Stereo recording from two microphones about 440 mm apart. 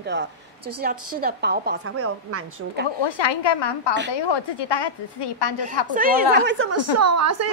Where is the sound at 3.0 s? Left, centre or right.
Left.